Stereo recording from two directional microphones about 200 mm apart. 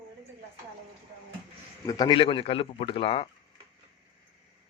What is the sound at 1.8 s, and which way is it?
A man's voice, 20° left (ahead or behind).